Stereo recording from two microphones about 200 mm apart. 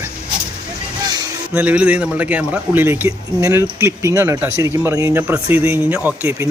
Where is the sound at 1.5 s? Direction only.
5° right (ahead or behind).